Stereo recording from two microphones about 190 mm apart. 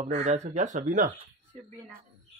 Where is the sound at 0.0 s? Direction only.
35° right (ahead or behind).